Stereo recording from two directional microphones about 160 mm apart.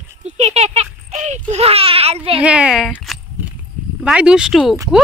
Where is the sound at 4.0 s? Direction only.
5° right (ahead or behind).